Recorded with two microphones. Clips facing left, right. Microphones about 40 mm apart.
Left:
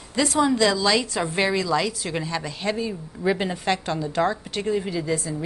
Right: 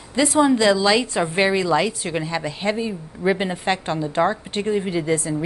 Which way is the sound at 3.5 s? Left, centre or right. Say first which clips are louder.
Right 2 dB; right.